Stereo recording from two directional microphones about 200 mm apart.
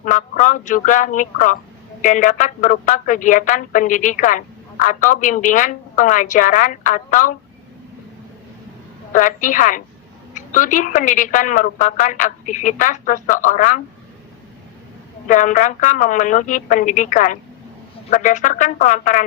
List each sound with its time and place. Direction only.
0.0 s speech: 40° left (ahead or behind)
9.1 s speech: 40° left (ahead or behind)
15.3 s speech: 40° left (ahead or behind)